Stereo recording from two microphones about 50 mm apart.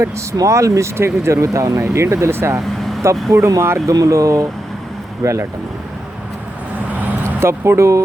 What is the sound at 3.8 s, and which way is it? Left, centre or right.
Speech, right.